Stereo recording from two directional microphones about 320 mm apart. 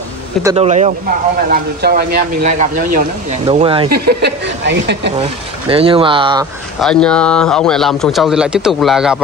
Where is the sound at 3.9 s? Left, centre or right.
Right.